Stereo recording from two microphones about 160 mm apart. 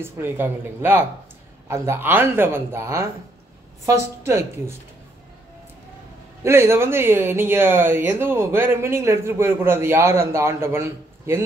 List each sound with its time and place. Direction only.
0.0 s speech: 15° right (ahead or behind)
6.4 s speech: 15° right (ahead or behind)